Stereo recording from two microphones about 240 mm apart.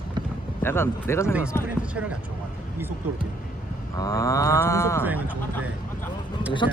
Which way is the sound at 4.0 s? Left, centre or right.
Centre.